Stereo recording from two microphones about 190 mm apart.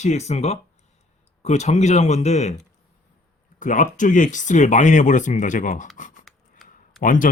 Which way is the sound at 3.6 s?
40° left (ahead or behind).